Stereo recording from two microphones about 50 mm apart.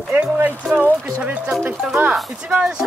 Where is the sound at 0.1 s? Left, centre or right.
Right.